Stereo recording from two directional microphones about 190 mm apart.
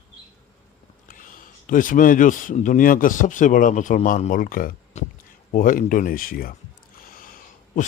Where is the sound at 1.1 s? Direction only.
45° left (ahead or behind).